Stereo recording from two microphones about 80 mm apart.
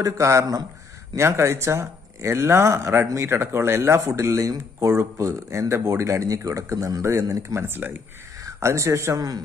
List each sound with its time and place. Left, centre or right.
0.0 s speech: right
7.6 s speech: right
9.1 s speech: right